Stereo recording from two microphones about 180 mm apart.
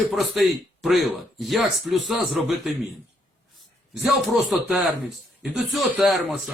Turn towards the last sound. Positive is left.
turn(degrees=0)  # may be behind; listen again after turning